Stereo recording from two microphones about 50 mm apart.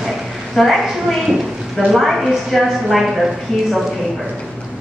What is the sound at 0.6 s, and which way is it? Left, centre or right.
A woman's voice, centre.